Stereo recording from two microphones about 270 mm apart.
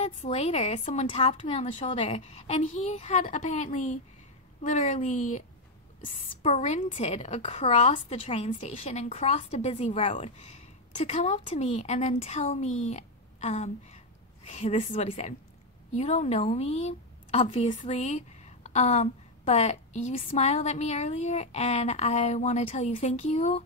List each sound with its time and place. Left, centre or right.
0.0 s a woman's voice: left
6.4 s a woman's voice: left